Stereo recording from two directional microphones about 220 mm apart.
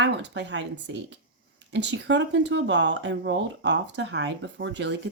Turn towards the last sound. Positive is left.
turn(degrees=-55)  # may be behind; listen again after turning